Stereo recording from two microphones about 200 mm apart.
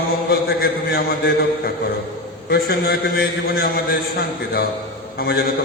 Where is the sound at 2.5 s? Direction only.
50° left (ahead or behind).